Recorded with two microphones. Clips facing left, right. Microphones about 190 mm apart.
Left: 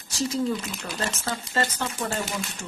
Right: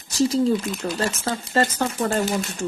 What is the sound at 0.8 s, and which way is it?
Speech, 35° right (ahead or behind).